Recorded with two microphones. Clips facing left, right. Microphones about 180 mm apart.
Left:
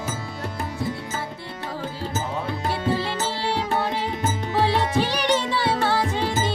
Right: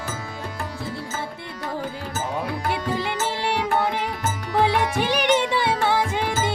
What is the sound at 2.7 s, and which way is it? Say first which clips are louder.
Music: left 2 dB; 15° right (ahead or behind).